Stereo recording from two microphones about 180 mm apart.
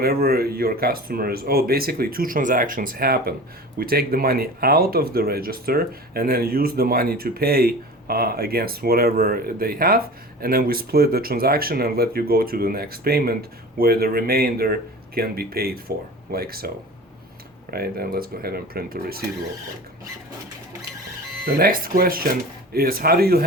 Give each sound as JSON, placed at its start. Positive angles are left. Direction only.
{"t": 0.0, "sound": "speech", "side_deg": -60}
{"t": 21.4, "sound": "speech", "side_deg": -55}